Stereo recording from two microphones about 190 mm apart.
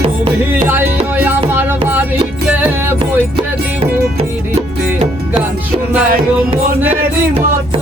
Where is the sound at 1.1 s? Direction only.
10° right (ahead or behind).